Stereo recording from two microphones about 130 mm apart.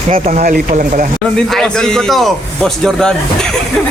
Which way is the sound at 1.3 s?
5° left (ahead or behind).